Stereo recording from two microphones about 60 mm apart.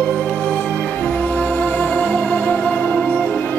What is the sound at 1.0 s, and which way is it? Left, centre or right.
Music, centre.